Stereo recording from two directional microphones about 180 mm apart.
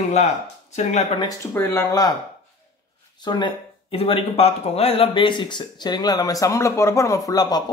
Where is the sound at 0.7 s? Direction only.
35° left (ahead or behind).